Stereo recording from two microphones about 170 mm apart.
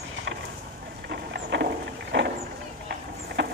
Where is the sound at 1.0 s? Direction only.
70° right (ahead or behind).